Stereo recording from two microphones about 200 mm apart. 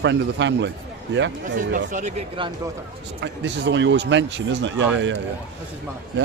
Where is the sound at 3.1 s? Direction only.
60° right (ahead or behind).